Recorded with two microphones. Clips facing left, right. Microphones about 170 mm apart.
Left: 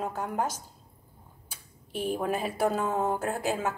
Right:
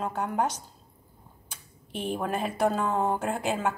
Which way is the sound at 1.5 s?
5° left (ahead or behind).